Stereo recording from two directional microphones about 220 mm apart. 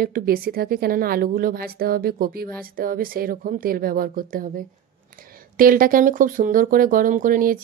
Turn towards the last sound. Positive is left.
turn(degrees=-40)  # may be behind; listen again after turning